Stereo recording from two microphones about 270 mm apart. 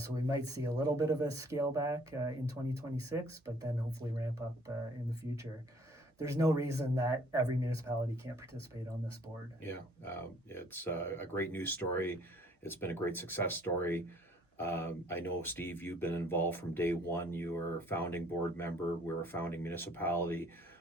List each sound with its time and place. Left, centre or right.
0.0 s speech: centre
4.7 s speech: centre
6.1 s speech: centre
9.6 s speech: centre